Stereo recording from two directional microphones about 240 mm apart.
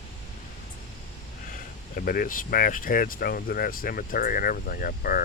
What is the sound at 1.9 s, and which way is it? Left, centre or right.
Speech, left.